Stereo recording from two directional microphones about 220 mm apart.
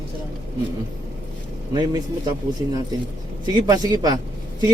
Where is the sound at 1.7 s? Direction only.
20° right (ahead or behind).